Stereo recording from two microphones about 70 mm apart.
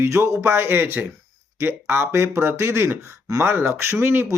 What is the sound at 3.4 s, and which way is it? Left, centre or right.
Speech, right.